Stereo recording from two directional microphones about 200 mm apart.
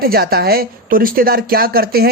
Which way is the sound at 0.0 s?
50° right (ahead or behind).